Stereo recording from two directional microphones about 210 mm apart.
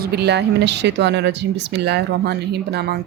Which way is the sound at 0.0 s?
50° right (ahead or behind).